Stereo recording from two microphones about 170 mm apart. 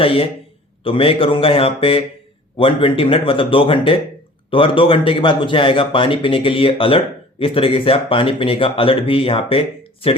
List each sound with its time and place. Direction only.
0.0 s speech: 30° left (ahead or behind)